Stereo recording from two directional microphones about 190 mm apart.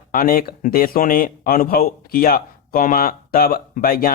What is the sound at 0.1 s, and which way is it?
Speech, 50° left (ahead or behind).